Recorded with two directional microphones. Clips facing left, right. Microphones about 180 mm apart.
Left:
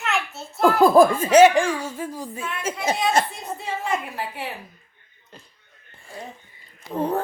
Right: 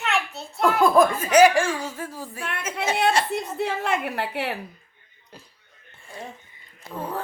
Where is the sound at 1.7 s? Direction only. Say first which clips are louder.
Left 1 dB; 10° right (ahead or behind).